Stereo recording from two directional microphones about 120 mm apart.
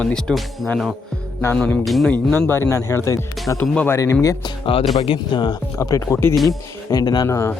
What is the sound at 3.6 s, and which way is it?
Speech, 10° left (ahead or behind).